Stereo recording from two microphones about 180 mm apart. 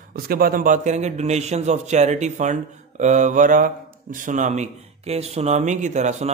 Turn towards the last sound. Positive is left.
turn(degrees=-40)  # may be behind; listen again after turning